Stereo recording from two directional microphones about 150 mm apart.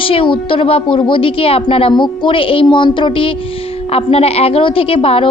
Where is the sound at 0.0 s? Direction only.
35° left (ahead or behind).